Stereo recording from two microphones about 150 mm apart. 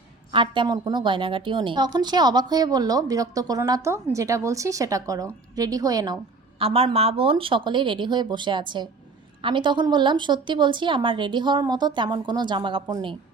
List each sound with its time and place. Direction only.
0.3 s a woman's voice: 35° right (ahead or behind)
6.6 s a woman's voice: 40° right (ahead or behind)